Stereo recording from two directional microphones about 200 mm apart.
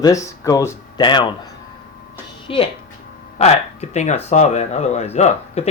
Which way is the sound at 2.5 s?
25° left (ahead or behind).